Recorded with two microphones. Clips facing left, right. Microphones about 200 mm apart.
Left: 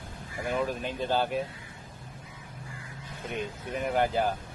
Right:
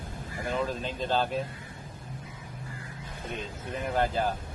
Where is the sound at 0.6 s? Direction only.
15° left (ahead or behind).